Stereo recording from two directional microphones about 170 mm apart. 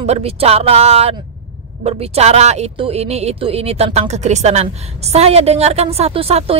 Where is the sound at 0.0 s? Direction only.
35° right (ahead or behind).